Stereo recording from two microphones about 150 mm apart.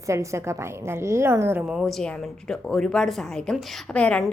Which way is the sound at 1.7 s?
Centre (ahead or behind).